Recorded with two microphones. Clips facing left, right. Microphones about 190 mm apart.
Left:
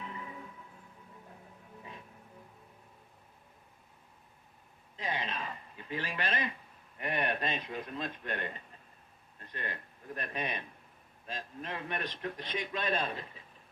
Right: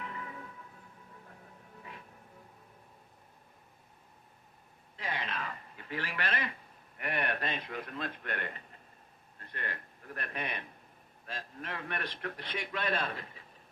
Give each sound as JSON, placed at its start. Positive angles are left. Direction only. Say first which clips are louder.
{"t": 0.0, "sound": "music", "louder": "right 1 dB", "side_deg": 20}
{"t": 4.9, "sound": "a sound", "louder": "left 1 dB", "side_deg": 20}
{"t": 7.0, "sound": "a man's voice", "louder": "left 1 dB", "side_deg": 15}